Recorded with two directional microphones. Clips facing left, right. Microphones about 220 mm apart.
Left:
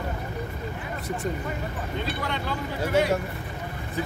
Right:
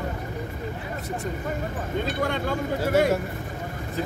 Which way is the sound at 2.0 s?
45° right (ahead or behind).